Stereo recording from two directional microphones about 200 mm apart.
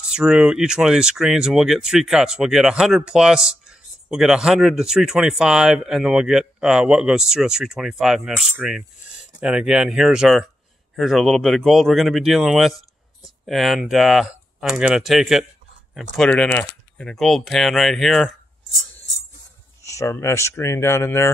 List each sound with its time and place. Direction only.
0.1 s speech: 5° right (ahead or behind)
19.8 s speech: 15° left (ahead or behind)